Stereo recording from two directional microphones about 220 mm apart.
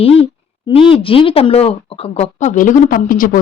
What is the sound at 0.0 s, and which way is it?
Speech, 25° left (ahead or behind).